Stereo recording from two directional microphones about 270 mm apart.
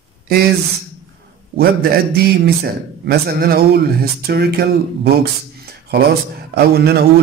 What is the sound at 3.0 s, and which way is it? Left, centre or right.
Speech, right.